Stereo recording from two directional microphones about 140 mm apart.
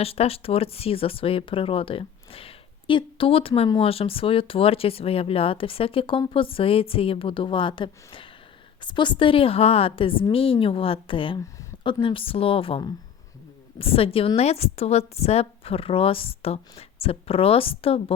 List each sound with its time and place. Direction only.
0.0 s a woman's voice: 45° left (ahead or behind)